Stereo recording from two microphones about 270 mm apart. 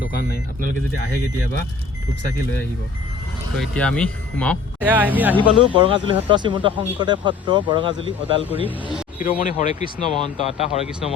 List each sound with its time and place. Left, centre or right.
3.6 s speech: centre
5.4 s speech: centre
8.6 s speech: centre
9.1 s speech: left